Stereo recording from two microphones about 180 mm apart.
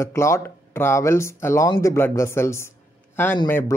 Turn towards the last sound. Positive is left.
turn(degrees=10)  # may be behind; listen again after turning